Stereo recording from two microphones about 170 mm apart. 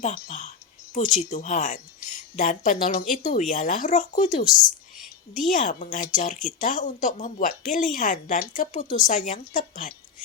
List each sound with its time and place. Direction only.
0.0 s speech: 45° left (ahead or behind)